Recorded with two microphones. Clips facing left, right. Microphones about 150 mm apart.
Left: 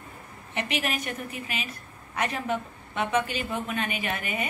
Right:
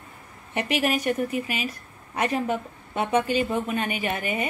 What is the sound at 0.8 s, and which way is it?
Speech, 40° right (ahead or behind).